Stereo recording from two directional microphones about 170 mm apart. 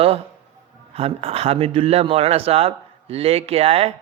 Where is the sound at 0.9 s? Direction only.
35° right (ahead or behind).